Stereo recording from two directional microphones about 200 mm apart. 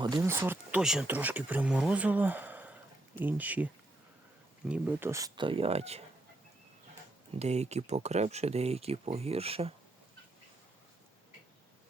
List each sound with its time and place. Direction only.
0.0 s speech: 15° right (ahead or behind)
4.7 s speech: 10° right (ahead or behind); by 6.0 s 30° right (ahead or behind)
7.3 s speech: 35° right (ahead or behind)